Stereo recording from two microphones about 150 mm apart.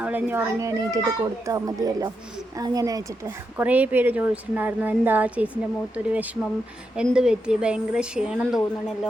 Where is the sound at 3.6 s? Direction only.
10° right (ahead or behind).